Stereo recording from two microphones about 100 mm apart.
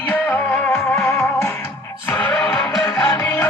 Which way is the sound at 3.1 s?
25° left (ahead or behind).